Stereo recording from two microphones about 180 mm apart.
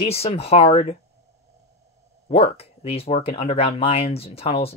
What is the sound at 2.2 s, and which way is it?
Speech, 35° left (ahead or behind).